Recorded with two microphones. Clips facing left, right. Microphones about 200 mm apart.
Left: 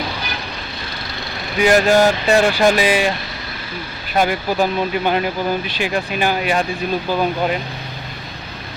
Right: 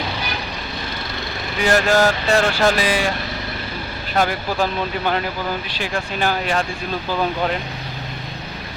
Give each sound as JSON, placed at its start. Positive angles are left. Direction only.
{"t": 1.6, "sound": "speech", "side_deg": 15}
{"t": 4.2, "sound": "speech", "side_deg": 15}